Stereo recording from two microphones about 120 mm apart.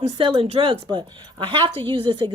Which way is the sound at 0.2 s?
50° right (ahead or behind).